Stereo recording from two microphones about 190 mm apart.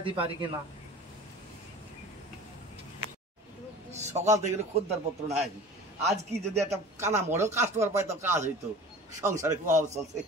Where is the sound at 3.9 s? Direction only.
35° right (ahead or behind).